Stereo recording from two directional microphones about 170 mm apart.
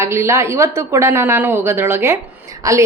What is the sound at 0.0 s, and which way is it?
A woman's voice, 15° right (ahead or behind).